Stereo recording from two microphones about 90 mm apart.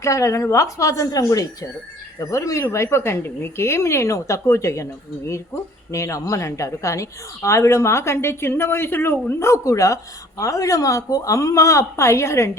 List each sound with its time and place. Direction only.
0.0 s a woman's voice: 35° left (ahead or behind)
5.9 s a woman's voice: 35° left (ahead or behind)